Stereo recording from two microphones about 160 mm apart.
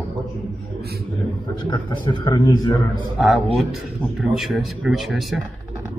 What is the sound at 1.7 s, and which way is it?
A man's voice, 30° left (ahead or behind).